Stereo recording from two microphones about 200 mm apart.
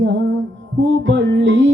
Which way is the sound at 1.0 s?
65° right (ahead or behind).